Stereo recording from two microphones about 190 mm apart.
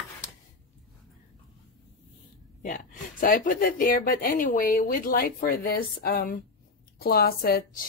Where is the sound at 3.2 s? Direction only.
45° left (ahead or behind).